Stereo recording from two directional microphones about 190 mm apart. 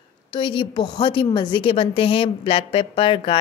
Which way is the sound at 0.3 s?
25° left (ahead or behind).